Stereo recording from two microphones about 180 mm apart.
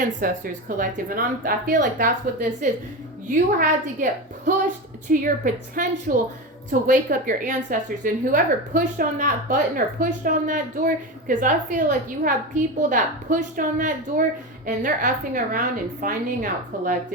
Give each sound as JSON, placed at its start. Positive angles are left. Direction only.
{"t": 0.0, "sound": "a woman's voice", "side_deg": -50}